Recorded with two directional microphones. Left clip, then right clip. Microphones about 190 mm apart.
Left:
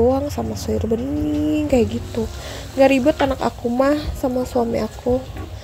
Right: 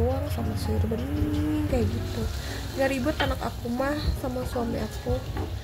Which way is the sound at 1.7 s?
40° left (ahead or behind).